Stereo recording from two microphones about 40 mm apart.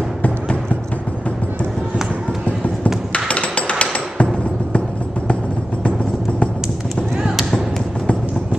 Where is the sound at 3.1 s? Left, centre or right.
Left.